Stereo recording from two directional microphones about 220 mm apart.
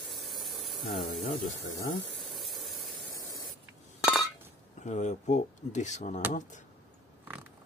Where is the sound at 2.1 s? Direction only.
Centre (ahead or behind).